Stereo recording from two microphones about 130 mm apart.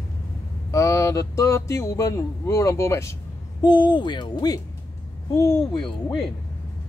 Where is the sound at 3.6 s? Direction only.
35° left (ahead or behind).